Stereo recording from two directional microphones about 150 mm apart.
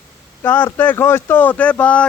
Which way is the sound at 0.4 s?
15° left (ahead or behind).